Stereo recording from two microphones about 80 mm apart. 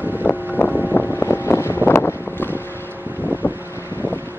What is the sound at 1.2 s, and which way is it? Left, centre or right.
Vehicle, left.